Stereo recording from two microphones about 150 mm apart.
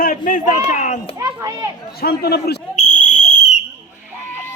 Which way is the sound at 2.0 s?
90° left.